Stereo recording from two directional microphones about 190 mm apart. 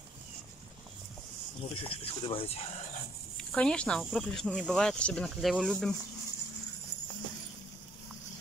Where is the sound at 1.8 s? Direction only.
30° left (ahead or behind).